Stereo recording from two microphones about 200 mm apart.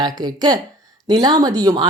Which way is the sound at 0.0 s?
20° right (ahead or behind).